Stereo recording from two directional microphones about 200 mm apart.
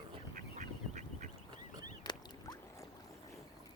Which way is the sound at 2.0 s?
20° left (ahead or behind).